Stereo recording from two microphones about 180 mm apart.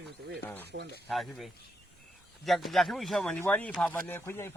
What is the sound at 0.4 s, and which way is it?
Speech, 10° left (ahead or behind).